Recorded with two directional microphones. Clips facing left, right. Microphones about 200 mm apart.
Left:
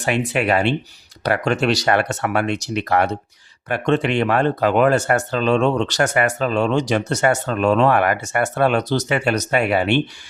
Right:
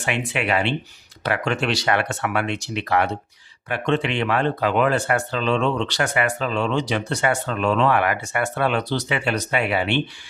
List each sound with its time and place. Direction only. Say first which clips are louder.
0.0 s speech: left 5 dB; 40° left (ahead or behind)